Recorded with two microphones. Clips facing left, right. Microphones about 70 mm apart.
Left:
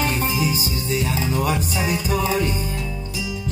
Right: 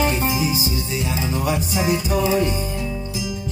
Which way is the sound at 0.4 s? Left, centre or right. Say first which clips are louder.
Right 1 dB; left.